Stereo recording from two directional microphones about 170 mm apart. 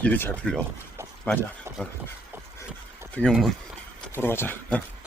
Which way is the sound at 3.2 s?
Centre (ahead or behind).